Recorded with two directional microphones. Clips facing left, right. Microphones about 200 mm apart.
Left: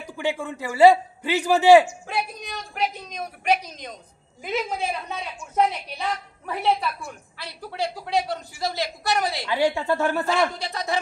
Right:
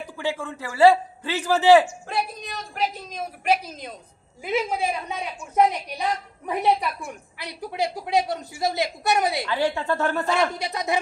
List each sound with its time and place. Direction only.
0.2 s a man's voice: 15° left (ahead or behind)
2.0 s a man's voice: centre (ahead or behind); by 9.4 s 20° right (ahead or behind)
9.5 s a man's voice: 10° left (ahead or behind)
10.6 s speech: 20° right (ahead or behind)